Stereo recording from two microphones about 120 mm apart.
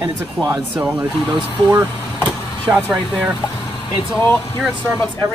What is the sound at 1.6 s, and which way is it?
Speech, 30° right (ahead or behind).